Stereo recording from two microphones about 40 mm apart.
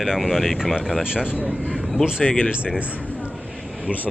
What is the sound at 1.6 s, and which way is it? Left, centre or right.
Speech, centre.